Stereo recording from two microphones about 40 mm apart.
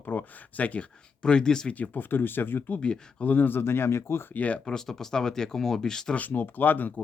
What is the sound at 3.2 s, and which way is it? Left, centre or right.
Speech, left.